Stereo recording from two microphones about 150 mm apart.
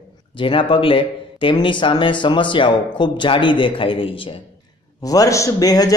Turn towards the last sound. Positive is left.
turn(degrees=25)  # may be behind; listen again after turning